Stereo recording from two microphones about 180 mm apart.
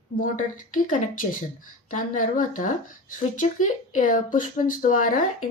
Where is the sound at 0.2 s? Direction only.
45° left (ahead or behind).